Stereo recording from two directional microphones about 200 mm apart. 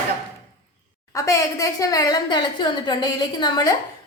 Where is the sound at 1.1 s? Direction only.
15° left (ahead or behind).